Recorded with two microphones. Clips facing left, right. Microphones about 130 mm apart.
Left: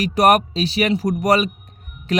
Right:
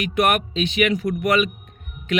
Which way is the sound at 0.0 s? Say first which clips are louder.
Left 5 dB; 35° left (ahead or behind).